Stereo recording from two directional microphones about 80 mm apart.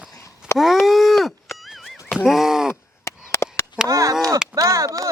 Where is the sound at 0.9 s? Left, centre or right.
Centre.